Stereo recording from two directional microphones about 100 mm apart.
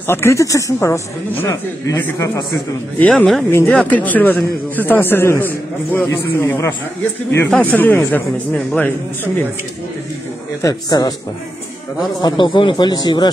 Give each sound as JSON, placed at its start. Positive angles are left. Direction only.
{"t": 0.0, "sound": "a man's voice", "side_deg": 25}
{"t": 3.1, "sound": "speech", "side_deg": 5}
{"t": 3.7, "sound": "a man's voice", "side_deg": 15}
{"t": 7.4, "sound": "a man's voice", "side_deg": 15}
{"t": 10.6, "sound": "a man's voice", "side_deg": 35}
{"t": 12.2, "sound": "speech", "side_deg": 50}